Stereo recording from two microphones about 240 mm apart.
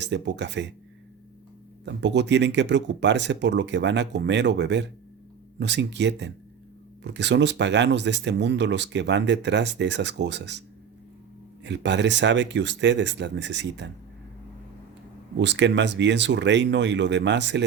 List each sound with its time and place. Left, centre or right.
0.0 s speech: right
1.8 s speech: right
11.6 s speech: right
15.4 s speech: right